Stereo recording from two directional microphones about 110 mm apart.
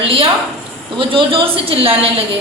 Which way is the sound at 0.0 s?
55° right (ahead or behind).